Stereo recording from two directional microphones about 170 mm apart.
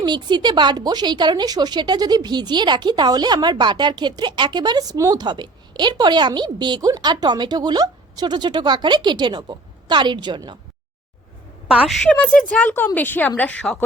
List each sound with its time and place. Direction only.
0.0 s a woman's voice: 25° right (ahead or behind)
11.7 s a woman's voice: 5° right (ahead or behind)
12.1 s speech: 5° left (ahead or behind)